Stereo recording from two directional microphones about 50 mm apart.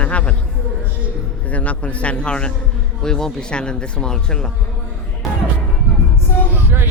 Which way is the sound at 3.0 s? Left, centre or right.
Centre.